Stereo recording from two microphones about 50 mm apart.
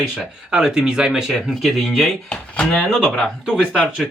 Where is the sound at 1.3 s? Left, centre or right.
Centre.